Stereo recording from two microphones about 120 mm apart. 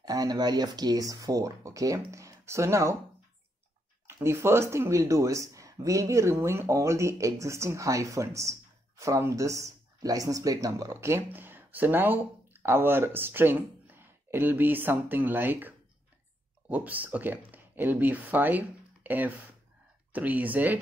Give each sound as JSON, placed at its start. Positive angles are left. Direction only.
{"t": 0.0, "sound": "speech", "side_deg": -30}
{"t": 4.2, "sound": "speech", "side_deg": -20}